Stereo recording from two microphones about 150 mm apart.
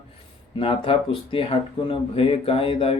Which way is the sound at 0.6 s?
35° left (ahead or behind).